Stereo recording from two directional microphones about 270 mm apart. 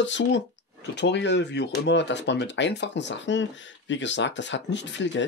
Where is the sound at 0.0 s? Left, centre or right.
Left.